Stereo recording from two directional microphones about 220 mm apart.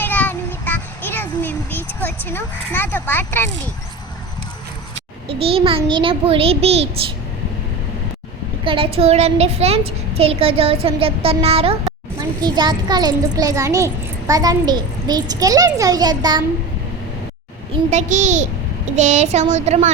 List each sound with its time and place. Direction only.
0.0 s child singing: 10° left (ahead or behind)
2.0 s speech: 10° left (ahead or behind)
5.3 s a child's voice: 25° right (ahead or behind)
8.6 s a child's voice: 25° right (ahead or behind)
17.9 s speech: 35° right (ahead or behind)